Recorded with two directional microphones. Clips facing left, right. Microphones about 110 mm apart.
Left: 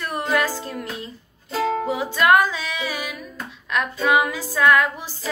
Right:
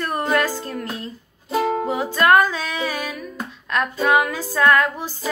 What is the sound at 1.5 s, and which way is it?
Music, 20° right (ahead or behind).